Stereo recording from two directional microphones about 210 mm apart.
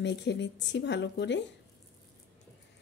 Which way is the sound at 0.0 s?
55° left (ahead or behind).